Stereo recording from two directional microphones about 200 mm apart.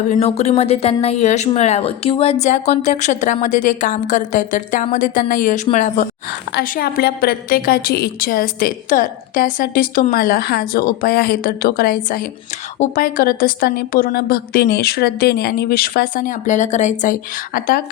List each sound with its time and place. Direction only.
0.1 s speech: 30° left (ahead or behind)
6.6 s a woman's voice: 50° left (ahead or behind)